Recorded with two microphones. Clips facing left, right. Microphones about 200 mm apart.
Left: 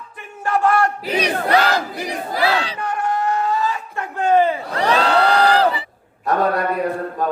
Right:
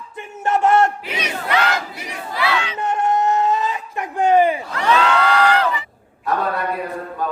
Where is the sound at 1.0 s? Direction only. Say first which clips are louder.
Left 6 dB; 35° left (ahead or behind).